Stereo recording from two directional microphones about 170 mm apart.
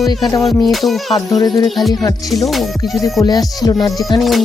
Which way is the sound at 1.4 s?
25° left (ahead or behind).